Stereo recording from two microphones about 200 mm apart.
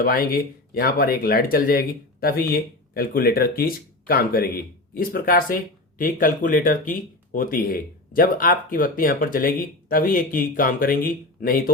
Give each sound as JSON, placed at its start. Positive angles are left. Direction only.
{"t": 0.0, "sound": "speech", "side_deg": 45}